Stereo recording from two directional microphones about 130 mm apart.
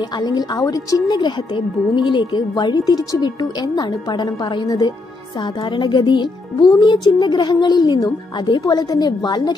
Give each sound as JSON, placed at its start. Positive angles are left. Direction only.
{"t": 0.2, "sound": "speech", "side_deg": 30}